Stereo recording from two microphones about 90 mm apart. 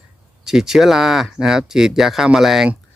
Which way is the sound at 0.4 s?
5° right (ahead or behind).